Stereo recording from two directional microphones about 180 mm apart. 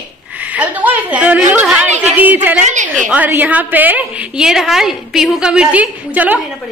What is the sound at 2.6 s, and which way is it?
Speech, 45° right (ahead or behind).